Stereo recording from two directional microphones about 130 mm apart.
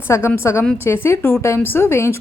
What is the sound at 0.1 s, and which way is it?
A woman's voice, 20° left (ahead or behind).